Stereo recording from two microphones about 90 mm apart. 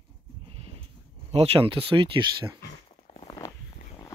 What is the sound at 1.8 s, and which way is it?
Speech, 70° right (ahead or behind).